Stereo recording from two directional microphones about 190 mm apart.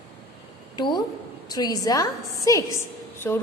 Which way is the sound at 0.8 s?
25° left (ahead or behind).